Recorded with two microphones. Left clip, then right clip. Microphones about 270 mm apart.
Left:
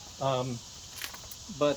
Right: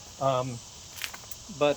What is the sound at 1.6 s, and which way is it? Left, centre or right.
Speech, centre.